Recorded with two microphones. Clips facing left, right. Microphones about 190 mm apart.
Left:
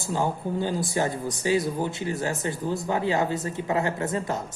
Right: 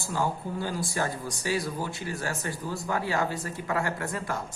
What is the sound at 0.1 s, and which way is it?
A man's voice, 20° left (ahead or behind).